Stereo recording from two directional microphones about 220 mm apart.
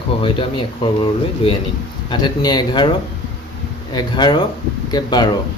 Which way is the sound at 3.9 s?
20° left (ahead or behind).